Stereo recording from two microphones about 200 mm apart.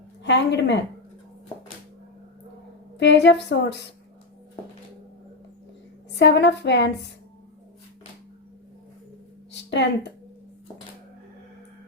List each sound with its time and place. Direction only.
0.3 s a woman's voice: 60° left (ahead or behind)
3.0 s a woman's voice: 60° left (ahead or behind)
6.1 s a woman's voice: 60° left (ahead or behind)
9.5 s a sound: 60° left (ahead or behind)